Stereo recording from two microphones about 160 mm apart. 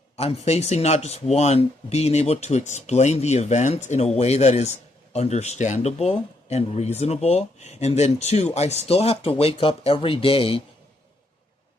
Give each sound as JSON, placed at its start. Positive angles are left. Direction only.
{"t": 0.2, "sound": "speech", "side_deg": 40}